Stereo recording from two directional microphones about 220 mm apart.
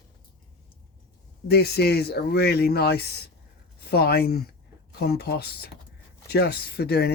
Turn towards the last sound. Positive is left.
turn(degrees=45)  # may be behind; listen again after turning